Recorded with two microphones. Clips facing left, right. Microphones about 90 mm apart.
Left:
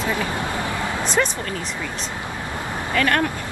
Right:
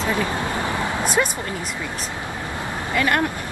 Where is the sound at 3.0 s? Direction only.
15° right (ahead or behind).